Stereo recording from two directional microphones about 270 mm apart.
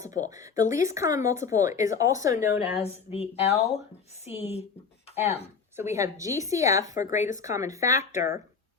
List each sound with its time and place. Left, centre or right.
0.7 s speech: centre
2.7 s speech: left
5.7 s speech: centre
6.9 s speech: left
7.4 s speech: centre